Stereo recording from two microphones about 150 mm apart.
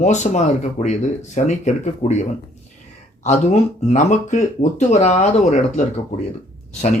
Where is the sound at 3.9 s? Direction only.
50° left (ahead or behind).